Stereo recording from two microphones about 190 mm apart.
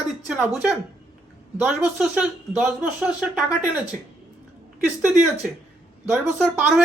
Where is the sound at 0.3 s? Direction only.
5° right (ahead or behind).